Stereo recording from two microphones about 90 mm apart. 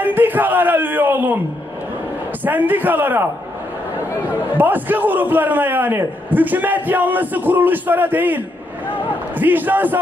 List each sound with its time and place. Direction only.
0.0 s a sound: 20° right (ahead or behind)
2.4 s a man's voice: 20° right (ahead or behind)
4.5 s a man's voice: 20° right (ahead or behind)
9.4 s a man's voice: 20° right (ahead or behind)